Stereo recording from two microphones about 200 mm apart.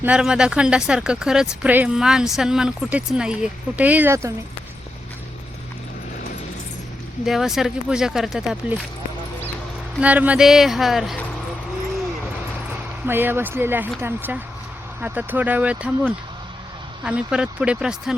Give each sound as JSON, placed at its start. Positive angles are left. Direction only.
{"t": 0.0, "sound": "speech", "side_deg": -5}
{"t": 7.3, "sound": "speech", "side_deg": 0}
{"t": 10.0, "sound": "speech", "side_deg": -5}
{"t": 13.1, "sound": "speech", "side_deg": -10}